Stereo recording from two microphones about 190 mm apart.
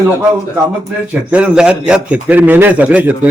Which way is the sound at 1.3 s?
5° right (ahead or behind).